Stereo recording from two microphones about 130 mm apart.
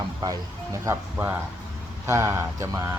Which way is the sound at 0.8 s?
20° right (ahead or behind).